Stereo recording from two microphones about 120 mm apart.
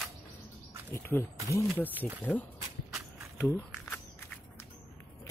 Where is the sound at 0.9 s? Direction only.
20° left (ahead or behind).